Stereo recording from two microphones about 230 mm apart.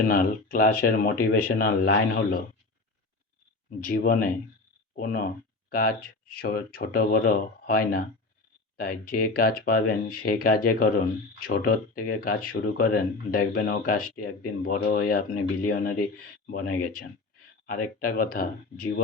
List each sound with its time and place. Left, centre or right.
0.0 s speech: left
3.8 s speech: left
8.8 s speech: left